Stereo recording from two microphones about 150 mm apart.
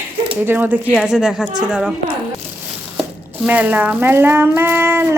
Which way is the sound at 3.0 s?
10° right (ahead or behind).